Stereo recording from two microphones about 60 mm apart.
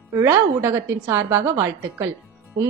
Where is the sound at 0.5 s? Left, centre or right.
Right.